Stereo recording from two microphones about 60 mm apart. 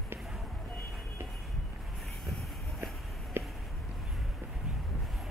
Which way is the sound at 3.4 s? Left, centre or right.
Right.